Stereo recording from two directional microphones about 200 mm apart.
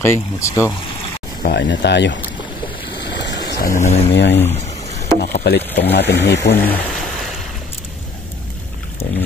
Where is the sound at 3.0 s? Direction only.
60° left (ahead or behind); by 4.0 s 40° left (ahead or behind).